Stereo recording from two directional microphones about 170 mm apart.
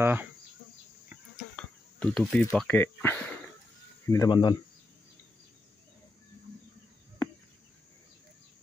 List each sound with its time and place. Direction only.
0.0 s speech: 10° right (ahead or behind)
1.6 s speech: 5° left (ahead or behind); by 4.6 s 25° left (ahead or behind)